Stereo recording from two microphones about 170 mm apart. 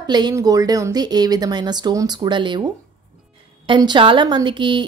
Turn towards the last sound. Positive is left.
turn(degrees=-30)  # may be behind; listen again after turning